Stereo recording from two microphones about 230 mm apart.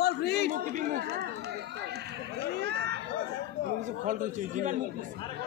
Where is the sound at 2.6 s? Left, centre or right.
Right.